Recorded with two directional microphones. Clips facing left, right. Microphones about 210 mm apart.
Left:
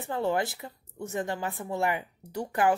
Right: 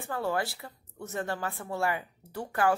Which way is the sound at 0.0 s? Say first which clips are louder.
Left 3 dB; 20° left (ahead or behind).